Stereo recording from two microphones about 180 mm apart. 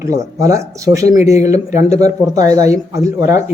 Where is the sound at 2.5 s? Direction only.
20° right (ahead or behind).